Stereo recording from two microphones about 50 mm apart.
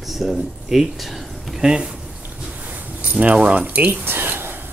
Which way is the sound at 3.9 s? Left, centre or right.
Right.